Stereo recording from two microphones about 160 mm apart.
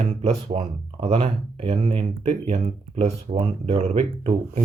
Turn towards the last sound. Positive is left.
turn(degrees=-45)  # may be behind; listen again after turning